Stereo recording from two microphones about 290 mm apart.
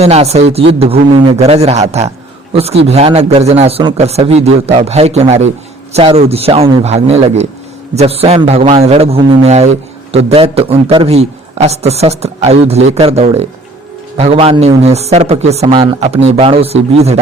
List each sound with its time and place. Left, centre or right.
0.0 s a man's voice: right